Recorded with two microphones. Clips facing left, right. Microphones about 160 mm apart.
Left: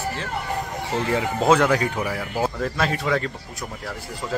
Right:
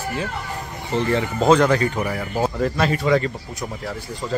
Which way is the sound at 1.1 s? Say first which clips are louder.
Right 2 dB; 5° left (ahead or behind).